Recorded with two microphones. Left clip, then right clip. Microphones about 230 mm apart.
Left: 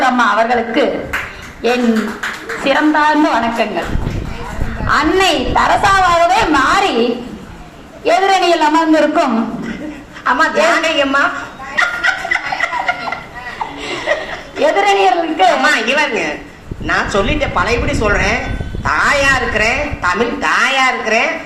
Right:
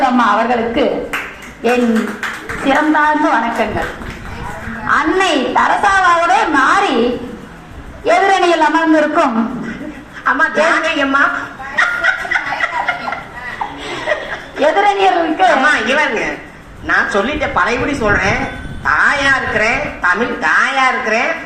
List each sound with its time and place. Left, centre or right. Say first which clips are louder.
0.0 s a sound: even; left
1.6 s a man's voice: right 1 dB; left
4.9 s a man's voice: left 1 dB; left
8.0 s a man's voice: even; left
10.2 s a man's voice: left 1 dB; left
11.7 s snicker: right 1 dB; left
13.8 s chuckle: left 2 dB; left
14.6 s a man's voice: even; left